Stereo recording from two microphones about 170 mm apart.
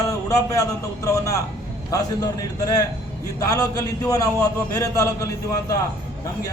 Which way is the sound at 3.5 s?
20° left (ahead or behind).